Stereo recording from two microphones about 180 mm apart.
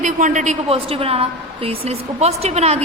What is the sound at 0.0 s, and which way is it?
A woman's voice, 45° right (ahead or behind).